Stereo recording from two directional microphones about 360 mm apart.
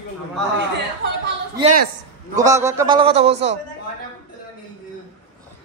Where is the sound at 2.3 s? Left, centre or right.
Centre.